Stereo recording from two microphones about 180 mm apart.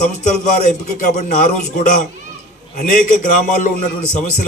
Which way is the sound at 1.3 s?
50° left (ahead or behind).